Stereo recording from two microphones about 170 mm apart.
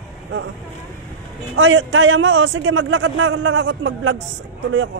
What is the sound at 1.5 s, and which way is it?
A man's voice, 90° right.